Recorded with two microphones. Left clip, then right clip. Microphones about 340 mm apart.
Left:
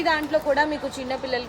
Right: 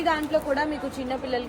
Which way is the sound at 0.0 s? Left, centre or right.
Left.